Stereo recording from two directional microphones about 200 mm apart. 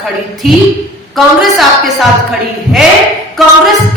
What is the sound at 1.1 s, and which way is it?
Music, centre (ahead or behind).